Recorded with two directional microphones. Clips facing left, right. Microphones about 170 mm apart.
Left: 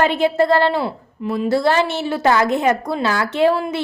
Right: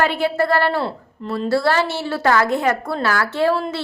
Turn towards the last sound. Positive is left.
turn(degrees=15)  # may be behind; listen again after turning